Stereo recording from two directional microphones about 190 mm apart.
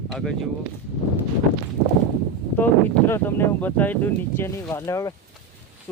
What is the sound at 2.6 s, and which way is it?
Speech, 10° left (ahead or behind).